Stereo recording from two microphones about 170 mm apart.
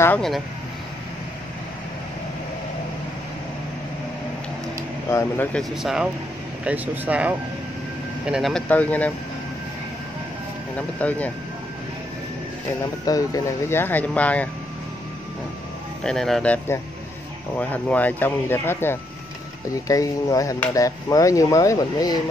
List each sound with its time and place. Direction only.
5.1 s speech: 10° left (ahead or behind)
5.6 s a man's voice: centre (ahead or behind)
10.8 s speech: 10° left (ahead or behind)
13.0 s speech: 20° left (ahead or behind)
16.0 s a man's voice: 5° left (ahead or behind)
17.6 s speech: 10° left (ahead or behind)